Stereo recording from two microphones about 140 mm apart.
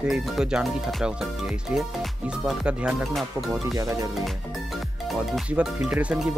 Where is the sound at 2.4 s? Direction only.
5° right (ahead or behind).